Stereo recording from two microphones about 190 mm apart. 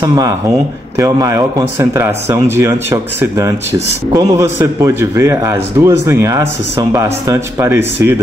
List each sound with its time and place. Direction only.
0.0 s speech: 20° right (ahead or behind)